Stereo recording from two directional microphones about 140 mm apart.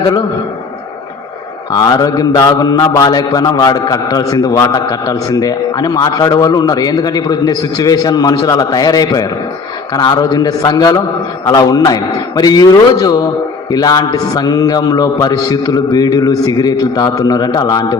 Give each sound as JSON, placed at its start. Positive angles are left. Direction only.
{"t": 1.7, "sound": "mantra", "side_deg": 30}